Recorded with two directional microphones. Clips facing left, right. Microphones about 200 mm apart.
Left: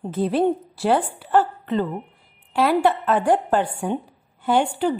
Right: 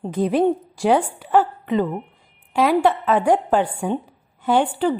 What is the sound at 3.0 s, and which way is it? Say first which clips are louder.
Speech: right 2 dB; 10° right (ahead or behind).